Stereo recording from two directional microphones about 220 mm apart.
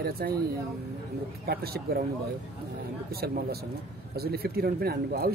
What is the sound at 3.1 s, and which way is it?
Speech, 45° right (ahead or behind).